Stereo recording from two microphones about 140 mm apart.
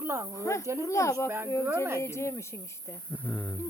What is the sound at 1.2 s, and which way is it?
Speech, 15° right (ahead or behind).